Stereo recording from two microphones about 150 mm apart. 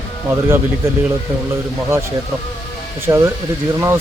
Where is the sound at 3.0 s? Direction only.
15° right (ahead or behind).